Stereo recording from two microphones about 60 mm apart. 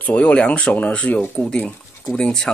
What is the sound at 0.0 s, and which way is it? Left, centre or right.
Speech, centre.